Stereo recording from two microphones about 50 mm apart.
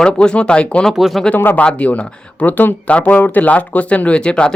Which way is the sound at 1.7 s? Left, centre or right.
Left.